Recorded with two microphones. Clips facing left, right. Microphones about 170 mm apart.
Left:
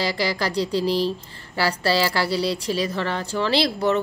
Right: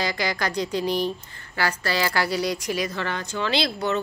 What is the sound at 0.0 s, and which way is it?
Speech, 30° left (ahead or behind).